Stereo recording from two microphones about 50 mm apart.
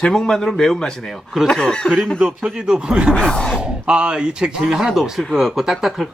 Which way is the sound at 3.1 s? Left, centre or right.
Centre.